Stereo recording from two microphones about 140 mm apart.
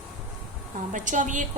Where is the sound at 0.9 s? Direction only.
65° right (ahead or behind).